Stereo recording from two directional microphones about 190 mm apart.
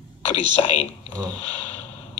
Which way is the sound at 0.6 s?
30° left (ahead or behind).